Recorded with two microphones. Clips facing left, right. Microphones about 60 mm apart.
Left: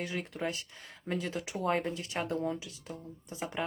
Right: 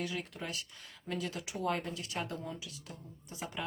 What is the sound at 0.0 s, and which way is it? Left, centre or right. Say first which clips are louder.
Speech: left 4 dB; left.